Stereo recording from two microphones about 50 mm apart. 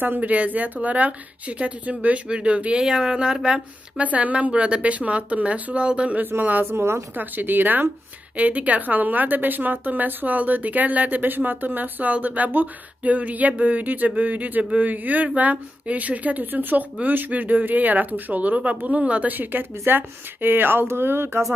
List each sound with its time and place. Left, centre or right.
0.2 s speech: right
2.8 s speech: centre
4.0 s speech: right
6.6 s a woman's voice: right
7.2 s a woman's voice: right